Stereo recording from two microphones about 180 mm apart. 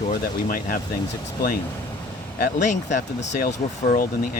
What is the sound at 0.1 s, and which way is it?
Speech, 50° left (ahead or behind).